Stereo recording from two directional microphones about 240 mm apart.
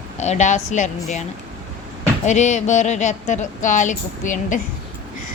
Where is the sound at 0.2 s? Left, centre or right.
Left.